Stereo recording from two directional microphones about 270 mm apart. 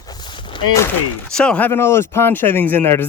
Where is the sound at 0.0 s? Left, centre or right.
Centre.